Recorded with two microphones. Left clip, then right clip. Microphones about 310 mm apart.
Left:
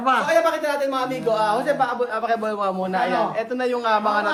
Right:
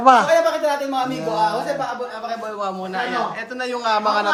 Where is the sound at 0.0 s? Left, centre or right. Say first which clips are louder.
Right 7 dB; centre.